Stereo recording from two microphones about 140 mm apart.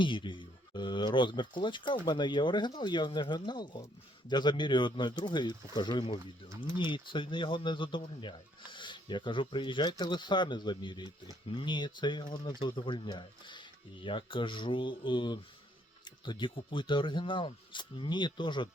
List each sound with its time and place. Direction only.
0.0 s speech: 35° left (ahead or behind)
16.0 s music: 35° left (ahead or behind)
16.7 s speech: 35° left (ahead or behind)